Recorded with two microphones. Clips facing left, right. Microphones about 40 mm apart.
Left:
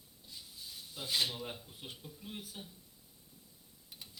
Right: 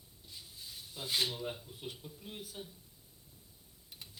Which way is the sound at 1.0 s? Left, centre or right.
Right.